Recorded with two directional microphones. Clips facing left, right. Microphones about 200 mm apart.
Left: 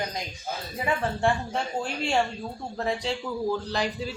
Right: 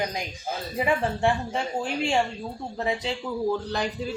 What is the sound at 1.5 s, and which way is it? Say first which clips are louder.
Speech: right 1 dB; 5° right (ahead or behind).